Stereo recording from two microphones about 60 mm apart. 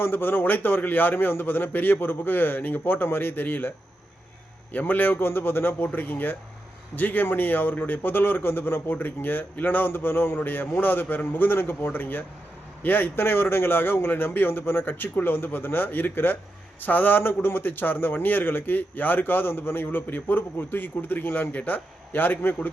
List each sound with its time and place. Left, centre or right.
0.0 s a man's voice: left
4.7 s a man's voice: left